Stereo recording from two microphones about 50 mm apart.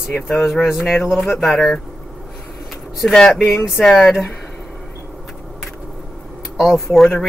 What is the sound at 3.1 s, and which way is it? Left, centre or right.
Speech, centre.